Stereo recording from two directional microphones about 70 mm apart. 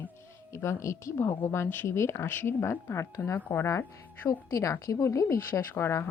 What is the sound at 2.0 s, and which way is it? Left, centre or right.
A woman's voice, left.